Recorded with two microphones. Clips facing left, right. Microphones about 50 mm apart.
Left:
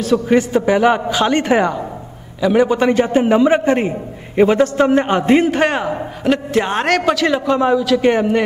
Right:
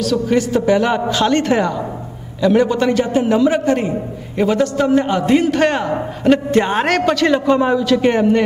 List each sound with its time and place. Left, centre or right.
0.0 s a man's voice: left
5.5 s a man's voice: centre